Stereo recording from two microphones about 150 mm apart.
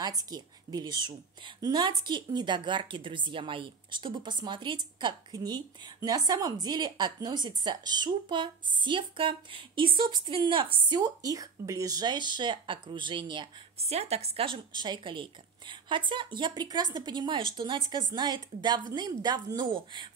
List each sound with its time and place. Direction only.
0.0 s a woman's voice: 25° right (ahead or behind)